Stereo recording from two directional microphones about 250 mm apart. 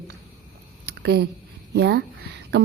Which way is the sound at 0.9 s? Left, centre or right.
Right.